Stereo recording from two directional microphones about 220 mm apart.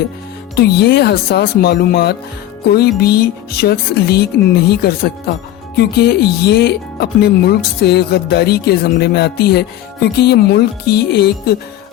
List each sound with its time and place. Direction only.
0.5 s speech: 50° left (ahead or behind)